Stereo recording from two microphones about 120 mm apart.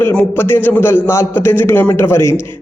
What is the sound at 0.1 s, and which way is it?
A man's voice, 15° left (ahead or behind).